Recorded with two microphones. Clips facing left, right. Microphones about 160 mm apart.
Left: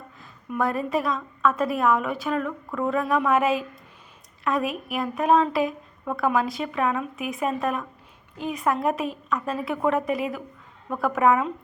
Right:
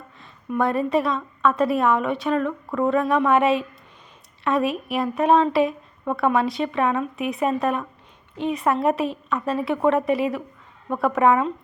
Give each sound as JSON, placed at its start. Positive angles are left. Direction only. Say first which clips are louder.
{"t": 0.6, "sound": "a woman's voice", "louder": "right 4 dB", "side_deg": 0}